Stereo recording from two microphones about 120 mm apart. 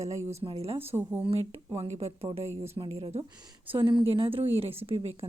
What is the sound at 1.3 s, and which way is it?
A woman's voice, 55° right (ahead or behind).